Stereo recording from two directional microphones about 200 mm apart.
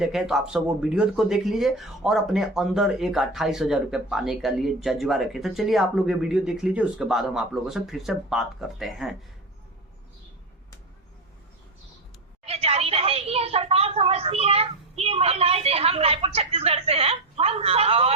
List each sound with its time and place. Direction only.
0.0 s speech: centre (ahead or behind)
12.5 s a woman's voice: 30° right (ahead or behind)